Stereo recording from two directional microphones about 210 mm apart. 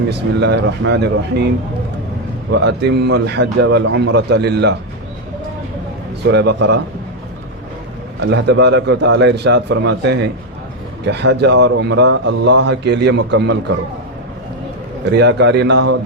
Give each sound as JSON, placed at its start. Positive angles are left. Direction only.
{"t": 0.1, "sound": "speech", "side_deg": -55}
{"t": 2.5, "sound": "a man's voice", "side_deg": -55}
{"t": 6.2, "sound": "a man's voice", "side_deg": -55}
{"t": 8.2, "sound": "a man's voice", "side_deg": -55}
{"t": 15.0, "sound": "a man's voice", "side_deg": -55}